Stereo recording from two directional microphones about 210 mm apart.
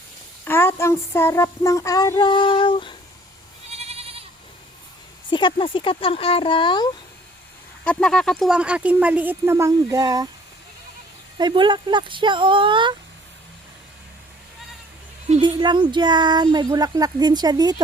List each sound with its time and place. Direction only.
0.4 s child singing: 10° left (ahead or behind)
3.7 s goat: 30° right (ahead or behind)
5.3 s speech: 20° left (ahead or behind)
7.9 s speech: 5° left (ahead or behind); by 10.2 s 15° right (ahead or behind)
11.3 s speech: 20° right (ahead or behind)
15.3 s speech: 20° right (ahead or behind)